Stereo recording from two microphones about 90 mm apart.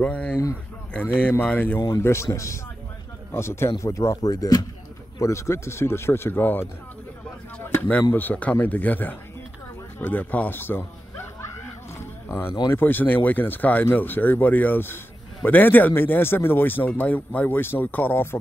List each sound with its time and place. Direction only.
0.0 s speech: 15° left (ahead or behind)
1.4 s speech: 20° left (ahead or behind)
2.0 s speech: 30° left (ahead or behind)
5.2 s speech: 30° left (ahead or behind)
8.1 s speech: 20° left (ahead or behind)
12.0 s a sound: 25° left (ahead or behind)
12.6 s speech: 25° left (ahead or behind)